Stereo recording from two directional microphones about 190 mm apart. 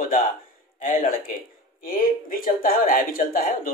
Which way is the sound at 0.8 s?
45° left (ahead or behind).